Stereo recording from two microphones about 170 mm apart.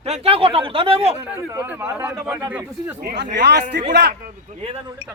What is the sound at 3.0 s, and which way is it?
Speech, 75° right (ahead or behind).